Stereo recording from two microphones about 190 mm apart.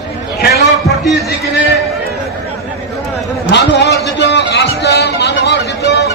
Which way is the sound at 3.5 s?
60° left (ahead or behind).